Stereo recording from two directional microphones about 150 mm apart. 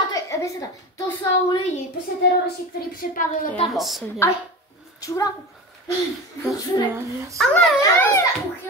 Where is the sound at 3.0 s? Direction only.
65° left (ahead or behind).